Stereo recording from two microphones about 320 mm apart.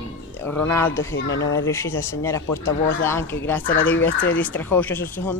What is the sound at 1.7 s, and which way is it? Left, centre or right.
Speech, centre.